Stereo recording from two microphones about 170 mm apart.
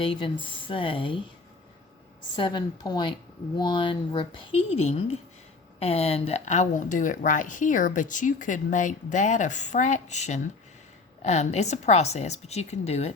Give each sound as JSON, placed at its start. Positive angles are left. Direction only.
{"t": 0.0, "sound": "speech", "side_deg": 30}
{"t": 2.3, "sound": "a woman's voice", "side_deg": 25}